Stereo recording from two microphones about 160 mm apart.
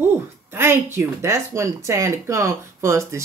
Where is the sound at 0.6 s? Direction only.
15° right (ahead or behind).